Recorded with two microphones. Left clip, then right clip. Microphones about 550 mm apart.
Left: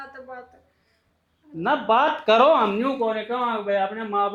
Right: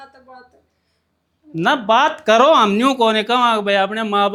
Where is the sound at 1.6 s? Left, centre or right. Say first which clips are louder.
Right 5 dB; right.